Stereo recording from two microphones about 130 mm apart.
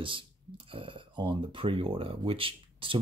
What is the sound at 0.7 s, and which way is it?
Speech, 40° right (ahead or behind).